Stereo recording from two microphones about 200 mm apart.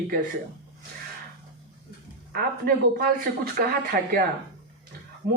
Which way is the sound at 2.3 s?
45° right (ahead or behind).